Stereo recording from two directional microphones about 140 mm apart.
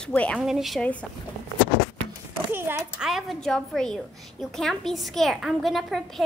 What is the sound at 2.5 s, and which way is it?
Speech, 15° right (ahead or behind).